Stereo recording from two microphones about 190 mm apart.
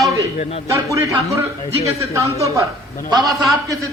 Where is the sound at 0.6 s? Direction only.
15° right (ahead or behind).